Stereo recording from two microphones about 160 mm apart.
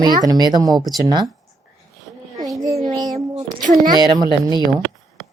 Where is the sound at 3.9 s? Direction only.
25° right (ahead or behind).